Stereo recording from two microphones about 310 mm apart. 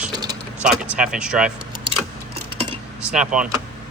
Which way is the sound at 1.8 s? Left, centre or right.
Centre.